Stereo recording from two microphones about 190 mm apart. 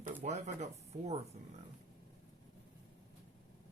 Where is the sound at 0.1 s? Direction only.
35° right (ahead or behind).